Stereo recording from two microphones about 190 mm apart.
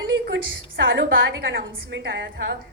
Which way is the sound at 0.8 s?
75° right (ahead or behind).